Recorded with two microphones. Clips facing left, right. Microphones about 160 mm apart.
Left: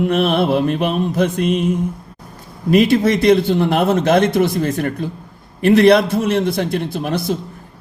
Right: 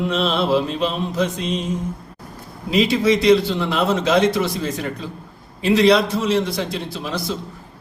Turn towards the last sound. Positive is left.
turn(degrees=55)  # may be behind; listen again after turning